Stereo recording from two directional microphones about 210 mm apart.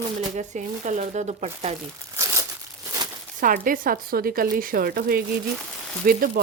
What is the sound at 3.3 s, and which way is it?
Speech, 40° right (ahead or behind).